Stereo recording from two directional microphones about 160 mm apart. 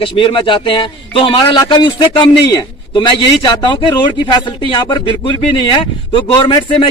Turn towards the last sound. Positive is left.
turn(degrees=30)  # may be behind; listen again after turning